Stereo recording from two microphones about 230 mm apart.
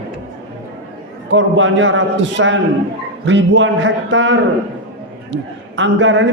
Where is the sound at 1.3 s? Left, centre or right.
Right.